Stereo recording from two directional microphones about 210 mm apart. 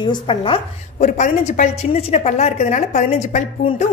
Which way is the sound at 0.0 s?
20° left (ahead or behind).